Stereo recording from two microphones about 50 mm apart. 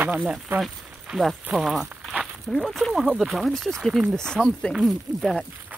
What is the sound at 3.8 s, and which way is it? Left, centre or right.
Speech, centre.